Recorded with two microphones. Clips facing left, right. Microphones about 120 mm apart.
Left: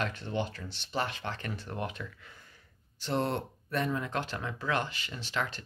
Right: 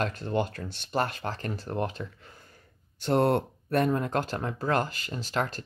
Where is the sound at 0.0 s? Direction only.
40° right (ahead or behind).